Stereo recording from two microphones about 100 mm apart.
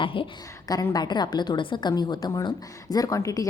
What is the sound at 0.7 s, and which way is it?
A woman's voice, 35° left (ahead or behind).